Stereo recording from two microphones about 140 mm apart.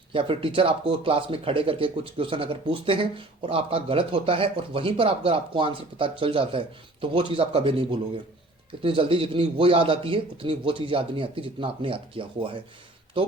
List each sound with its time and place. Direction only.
0.1 s speech: 40° right (ahead or behind)